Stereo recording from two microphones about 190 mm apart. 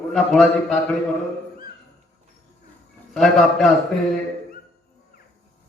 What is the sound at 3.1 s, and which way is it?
Speech, centre (ahead or behind).